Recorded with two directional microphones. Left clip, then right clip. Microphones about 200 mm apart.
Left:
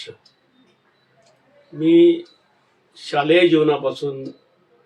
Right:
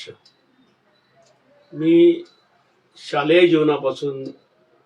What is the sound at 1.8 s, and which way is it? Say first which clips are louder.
Speech: left 1 dB; 5° left (ahead or behind).